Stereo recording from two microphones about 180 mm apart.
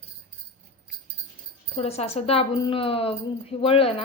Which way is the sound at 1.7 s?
35° left (ahead or behind).